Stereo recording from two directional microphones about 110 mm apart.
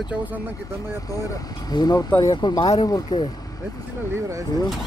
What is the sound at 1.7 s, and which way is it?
Speech, 40° left (ahead or behind).